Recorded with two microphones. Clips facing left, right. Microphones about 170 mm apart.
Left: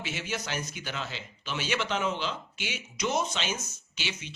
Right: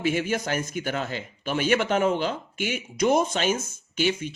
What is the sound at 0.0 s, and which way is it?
Speech, 50° right (ahead or behind).